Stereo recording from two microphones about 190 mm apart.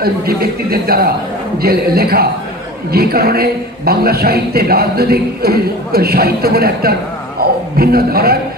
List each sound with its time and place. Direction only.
0.0 s a man's voice: 55° right (ahead or behind)